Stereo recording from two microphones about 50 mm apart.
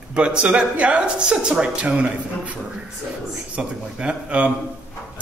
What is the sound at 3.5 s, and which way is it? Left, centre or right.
Speech, right.